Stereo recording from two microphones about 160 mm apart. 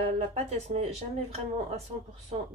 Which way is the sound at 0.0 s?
40° right (ahead or behind).